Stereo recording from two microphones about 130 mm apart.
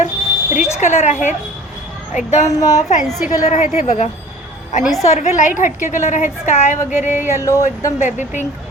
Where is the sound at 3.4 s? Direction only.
65° left (ahead or behind).